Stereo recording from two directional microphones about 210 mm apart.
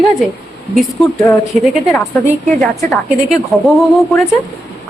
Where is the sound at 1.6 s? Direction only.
Centre (ahead or behind).